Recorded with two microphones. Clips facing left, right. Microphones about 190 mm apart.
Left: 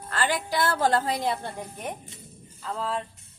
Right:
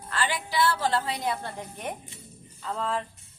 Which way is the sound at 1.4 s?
10° left (ahead or behind).